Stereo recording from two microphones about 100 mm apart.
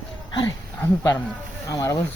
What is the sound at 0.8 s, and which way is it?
Speech, 25° left (ahead or behind).